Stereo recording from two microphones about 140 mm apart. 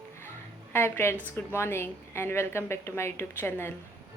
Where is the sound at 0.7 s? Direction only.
15° left (ahead or behind).